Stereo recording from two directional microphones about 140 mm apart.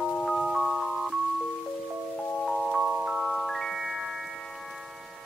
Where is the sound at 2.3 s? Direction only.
5° left (ahead or behind).